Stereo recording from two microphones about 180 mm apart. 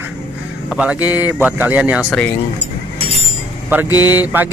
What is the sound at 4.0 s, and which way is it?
Speech, 10° right (ahead or behind).